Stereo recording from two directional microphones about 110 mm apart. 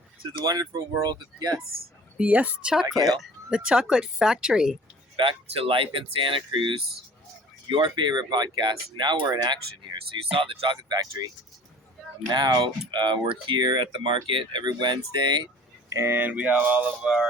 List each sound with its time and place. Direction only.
0.4 s speech: 35° right (ahead or behind)
2.1 s speech: 10° right (ahead or behind)
5.1 s speech: 55° right (ahead or behind)
7.9 s speech: 45° right (ahead or behind)
10.3 s speech: 55° right (ahead or behind)
10.8 s speech: 35° right (ahead or behind)
12.3 s speech: 40° right (ahead or behind)
15.9 s speech: 25° right (ahead or behind); by 17.2 s 5° right (ahead or behind)